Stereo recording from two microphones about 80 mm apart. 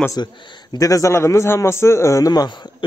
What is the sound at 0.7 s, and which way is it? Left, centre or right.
A man's voice, left.